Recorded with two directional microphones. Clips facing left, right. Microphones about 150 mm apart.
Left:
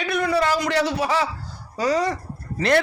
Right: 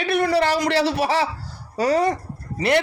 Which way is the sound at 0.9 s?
70° right (ahead or behind).